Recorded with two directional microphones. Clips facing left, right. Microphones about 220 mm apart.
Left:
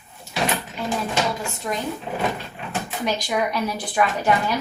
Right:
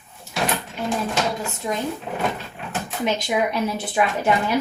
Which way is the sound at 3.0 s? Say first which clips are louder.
Right 2 dB; 25° right (ahead or behind).